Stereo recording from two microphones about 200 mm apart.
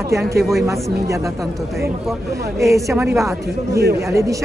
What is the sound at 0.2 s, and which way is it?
Speech, 55° right (ahead or behind).